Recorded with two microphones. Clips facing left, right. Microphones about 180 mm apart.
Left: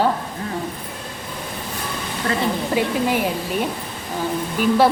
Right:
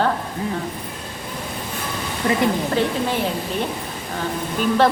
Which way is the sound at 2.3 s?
15° right (ahead or behind).